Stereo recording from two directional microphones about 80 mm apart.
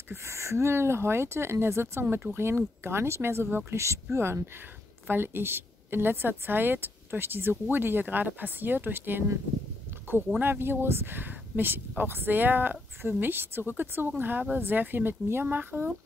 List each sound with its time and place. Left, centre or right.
0.1 s a woman's voice: right
10.4 s a woman's voice: right